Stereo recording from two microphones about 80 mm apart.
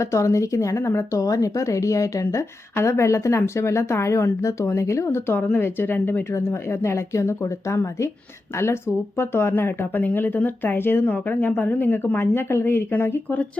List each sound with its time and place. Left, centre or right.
0.0 s a woman's voice: left